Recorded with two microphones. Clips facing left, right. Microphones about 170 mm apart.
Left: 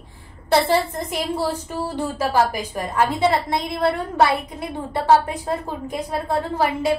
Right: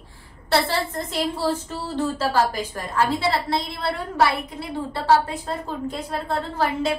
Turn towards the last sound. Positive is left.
turn(degrees=15)  # may be behind; listen again after turning